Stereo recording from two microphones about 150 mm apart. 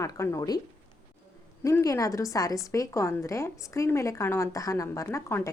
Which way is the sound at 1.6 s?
20° left (ahead or behind).